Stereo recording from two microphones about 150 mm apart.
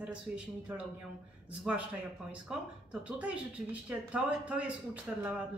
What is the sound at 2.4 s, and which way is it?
A man's voice, 5° right (ahead or behind).